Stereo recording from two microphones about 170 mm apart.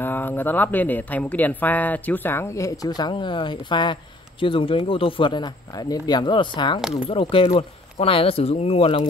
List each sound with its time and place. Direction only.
0.0 s speech: 10° left (ahead or behind); by 9.0 s 35° left (ahead or behind)